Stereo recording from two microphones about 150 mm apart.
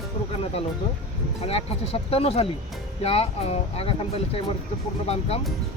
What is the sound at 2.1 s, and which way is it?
Speech, 40° left (ahead or behind).